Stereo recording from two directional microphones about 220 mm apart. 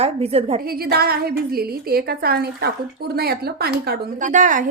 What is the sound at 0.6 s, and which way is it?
A woman's voice, 45° right (ahead or behind).